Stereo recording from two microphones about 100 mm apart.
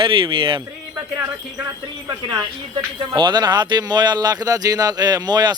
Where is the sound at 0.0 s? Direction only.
60° right (ahead or behind).